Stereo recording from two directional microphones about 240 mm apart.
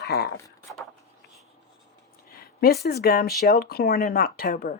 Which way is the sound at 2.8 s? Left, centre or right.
Left.